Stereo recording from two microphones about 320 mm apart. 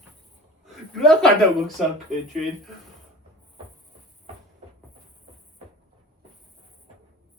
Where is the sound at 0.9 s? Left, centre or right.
Centre.